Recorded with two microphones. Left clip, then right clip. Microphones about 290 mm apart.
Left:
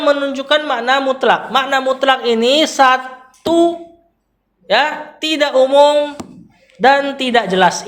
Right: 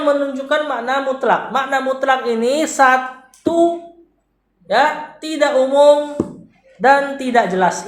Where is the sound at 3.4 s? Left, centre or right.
Left.